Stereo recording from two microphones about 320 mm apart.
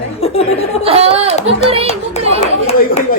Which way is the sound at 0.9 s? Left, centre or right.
Centre.